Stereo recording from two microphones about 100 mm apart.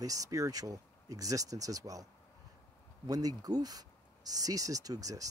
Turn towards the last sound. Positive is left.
turn(degrees=-35)  # may be behind; listen again after turning